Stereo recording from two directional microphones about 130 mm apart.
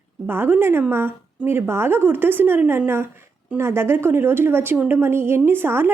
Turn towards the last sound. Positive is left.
turn(degrees=-15)  # may be behind; listen again after turning